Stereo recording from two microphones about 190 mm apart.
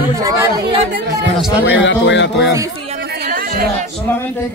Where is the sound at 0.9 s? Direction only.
65° right (ahead or behind).